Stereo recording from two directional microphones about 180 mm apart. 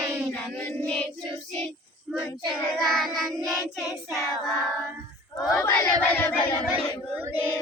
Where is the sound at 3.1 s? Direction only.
20° right (ahead or behind).